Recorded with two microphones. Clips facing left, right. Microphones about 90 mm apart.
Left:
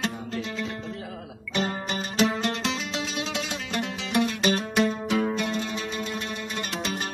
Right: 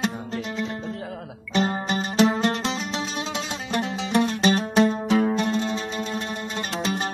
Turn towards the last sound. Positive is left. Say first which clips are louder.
# right 4 dB
turn(degrees=-30)  # may be behind; listen again after turning